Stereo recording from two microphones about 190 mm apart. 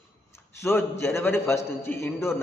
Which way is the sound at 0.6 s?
15° left (ahead or behind).